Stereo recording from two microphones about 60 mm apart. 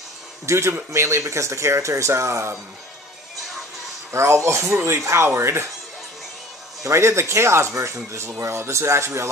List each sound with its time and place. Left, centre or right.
0.5 s speech: right
4.1 s speech: right
4.7 s speech: right
6.8 s speech: right